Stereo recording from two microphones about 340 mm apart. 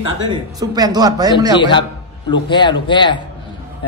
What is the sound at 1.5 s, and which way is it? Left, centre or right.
Speech, centre.